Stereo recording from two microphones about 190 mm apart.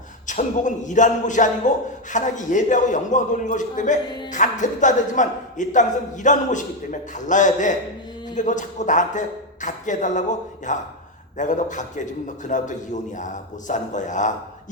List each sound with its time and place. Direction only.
0.3 s a man's voice: 40° left (ahead or behind)